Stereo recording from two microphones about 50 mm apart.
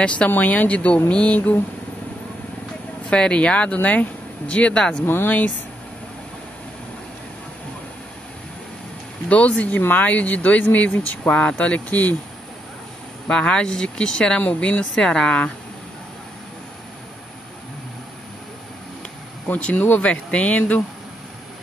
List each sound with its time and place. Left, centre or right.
0.0 s speech: left
0.3 s speech: left
3.1 s speech: left
5.0 s speech: left
9.3 s speech: left
13.3 s speech: centre
19.5 s speech: left